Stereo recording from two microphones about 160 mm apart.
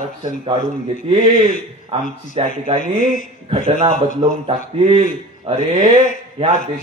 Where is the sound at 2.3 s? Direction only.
35° right (ahead or behind).